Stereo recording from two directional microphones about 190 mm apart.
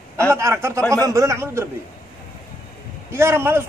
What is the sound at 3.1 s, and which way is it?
Speech, 15° right (ahead or behind).